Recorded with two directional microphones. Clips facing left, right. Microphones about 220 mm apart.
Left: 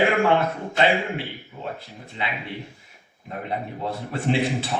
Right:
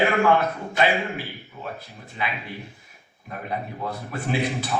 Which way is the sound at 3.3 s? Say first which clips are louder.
Left 1 dB; 25° left (ahead or behind).